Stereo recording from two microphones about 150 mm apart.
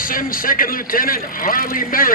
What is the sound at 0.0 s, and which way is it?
A man's voice, 70° left (ahead or behind).